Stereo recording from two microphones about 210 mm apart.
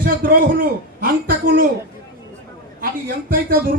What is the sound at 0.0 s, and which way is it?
A man's voice, 45° right (ahead or behind).